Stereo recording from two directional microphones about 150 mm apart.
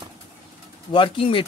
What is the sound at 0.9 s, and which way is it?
Speech, 35° left (ahead or behind).